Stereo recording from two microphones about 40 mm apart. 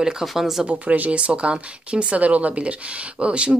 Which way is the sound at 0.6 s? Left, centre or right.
Right.